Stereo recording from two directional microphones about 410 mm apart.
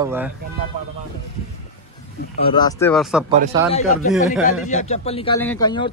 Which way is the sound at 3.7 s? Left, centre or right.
Centre.